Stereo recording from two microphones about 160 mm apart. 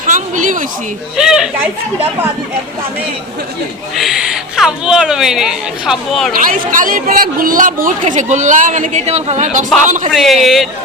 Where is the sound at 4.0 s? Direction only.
Centre (ahead or behind).